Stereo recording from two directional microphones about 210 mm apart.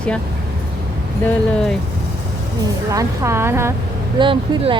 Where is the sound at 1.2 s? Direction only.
5° left (ahead or behind).